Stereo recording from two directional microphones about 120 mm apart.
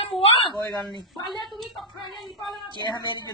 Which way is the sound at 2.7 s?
40° left (ahead or behind).